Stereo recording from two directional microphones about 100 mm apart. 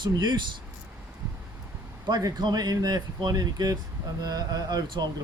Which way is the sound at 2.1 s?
40° right (ahead or behind).